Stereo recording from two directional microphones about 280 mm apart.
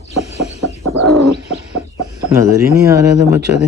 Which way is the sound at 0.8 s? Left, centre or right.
Right.